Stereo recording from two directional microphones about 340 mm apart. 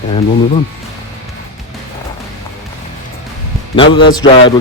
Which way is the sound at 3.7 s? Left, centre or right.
Centre.